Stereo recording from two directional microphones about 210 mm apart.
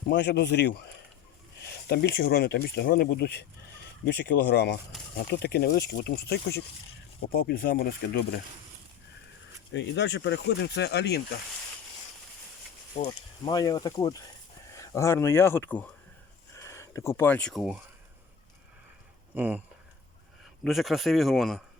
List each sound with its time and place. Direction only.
0.1 s speech: 55° left (ahead or behind)
1.9 s speech: 45° left (ahead or behind)
9.7 s speech: 55° left (ahead or behind)
13.1 s speech: 20° left (ahead or behind); by 17.7 s centre (ahead or behind)
19.4 s speech: 5° right (ahead or behind)
20.7 s speech: centre (ahead or behind)